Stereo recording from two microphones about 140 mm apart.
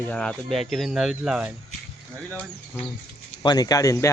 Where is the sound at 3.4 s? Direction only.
30° left (ahead or behind).